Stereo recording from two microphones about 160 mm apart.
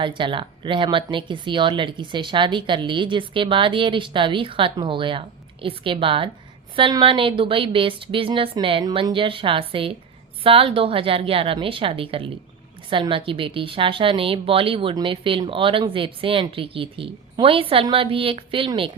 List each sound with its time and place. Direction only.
0.0 s speech: 30° right (ahead or behind)